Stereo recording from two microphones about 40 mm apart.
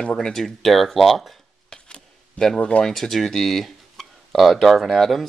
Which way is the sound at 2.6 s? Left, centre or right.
Left.